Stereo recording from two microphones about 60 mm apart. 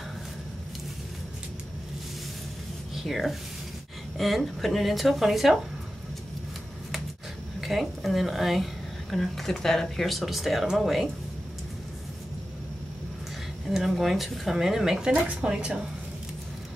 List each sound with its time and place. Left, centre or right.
2.9 s speech: centre
7.6 s speech: centre
13.7 s speech: centre
15.0 s a woman's voice: centre